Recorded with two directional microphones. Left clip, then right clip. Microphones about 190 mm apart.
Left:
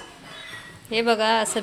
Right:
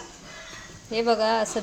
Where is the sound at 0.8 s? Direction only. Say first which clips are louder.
Left 2 dB; 5° right (ahead or behind).